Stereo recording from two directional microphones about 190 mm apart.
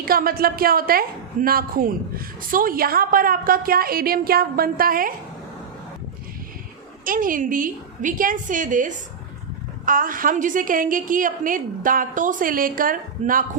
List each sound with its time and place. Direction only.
0.0 s a woman's voice: 50° right (ahead or behind)
7.0 s a woman's voice: 45° right (ahead or behind)